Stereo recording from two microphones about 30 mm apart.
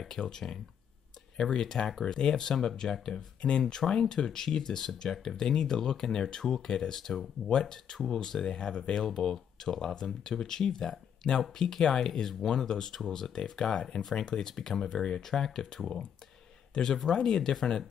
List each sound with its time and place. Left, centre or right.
0.2 s speech: left
3.3 s speech: left
3.6 s speech: centre
7.6 s speech: centre
14.5 s speech: centre
15.0 s speech: centre
17.1 s speech: centre